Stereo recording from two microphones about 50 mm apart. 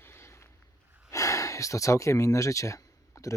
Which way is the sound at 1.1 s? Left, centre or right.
Left.